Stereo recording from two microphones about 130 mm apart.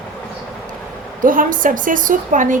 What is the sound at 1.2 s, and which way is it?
A woman's voice, 90° right.